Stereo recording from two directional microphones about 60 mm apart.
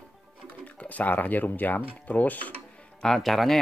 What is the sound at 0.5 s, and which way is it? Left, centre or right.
Speech, left.